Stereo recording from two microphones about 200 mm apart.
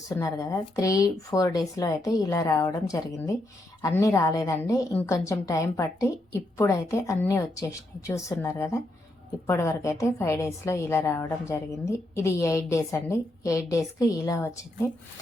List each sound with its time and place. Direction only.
0.2 s a woman's voice: 15° left (ahead or behind)